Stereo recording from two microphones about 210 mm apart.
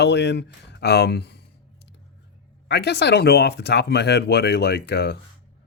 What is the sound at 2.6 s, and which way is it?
Speech, 50° left (ahead or behind).